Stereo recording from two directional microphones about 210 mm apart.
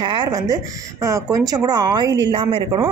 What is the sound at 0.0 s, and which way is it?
A woman's voice, 20° right (ahead or behind).